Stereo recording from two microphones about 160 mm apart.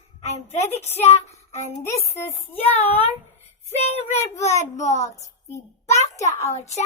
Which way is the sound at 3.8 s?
40° left (ahead or behind).